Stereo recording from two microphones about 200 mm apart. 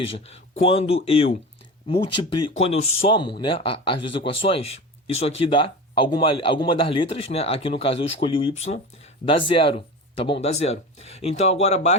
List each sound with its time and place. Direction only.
0.0 s speech: 30° left (ahead or behind)